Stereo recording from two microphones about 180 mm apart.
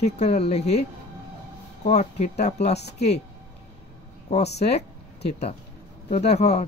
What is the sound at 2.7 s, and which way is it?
Speech, 65° left (ahead or behind).